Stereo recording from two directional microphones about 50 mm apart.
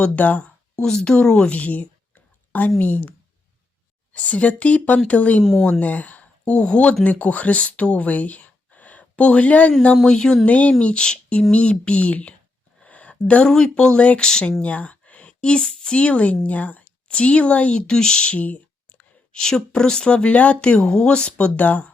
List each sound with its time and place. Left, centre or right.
0.0 s speech: left
0.8 s speech: centre
1.5 s speech: left
5.4 s speech: centre
5.8 s speech: left
9.9 s speech: centre
10.4 s speech: left
12.8 s a sound: left
13.5 s speech: centre
14.6 s speech: left
19.3 s speech: centre; by 21.9 s left